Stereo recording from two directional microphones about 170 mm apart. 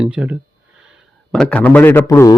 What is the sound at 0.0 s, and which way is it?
Speech, 5° right (ahead or behind).